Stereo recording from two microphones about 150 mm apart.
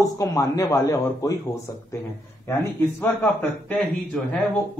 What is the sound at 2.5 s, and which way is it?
Speech, 15° left (ahead or behind).